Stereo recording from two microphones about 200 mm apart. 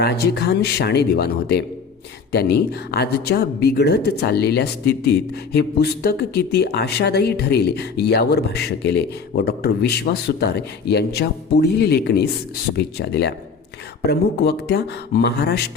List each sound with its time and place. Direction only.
0.0 s speech: 50° left (ahead or behind)